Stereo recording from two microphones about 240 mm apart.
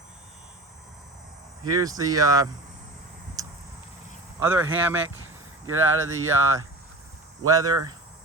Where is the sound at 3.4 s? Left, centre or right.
Centre.